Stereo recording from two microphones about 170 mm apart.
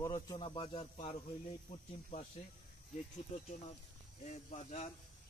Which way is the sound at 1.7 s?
45° left (ahead or behind).